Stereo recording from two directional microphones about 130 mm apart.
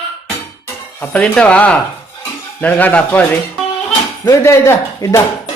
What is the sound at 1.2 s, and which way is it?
Speech, 10° left (ahead or behind).